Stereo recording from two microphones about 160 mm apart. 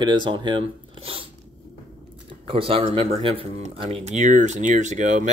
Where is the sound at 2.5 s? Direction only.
35° right (ahead or behind).